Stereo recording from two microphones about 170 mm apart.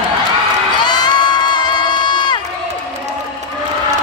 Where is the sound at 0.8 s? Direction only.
25° left (ahead or behind).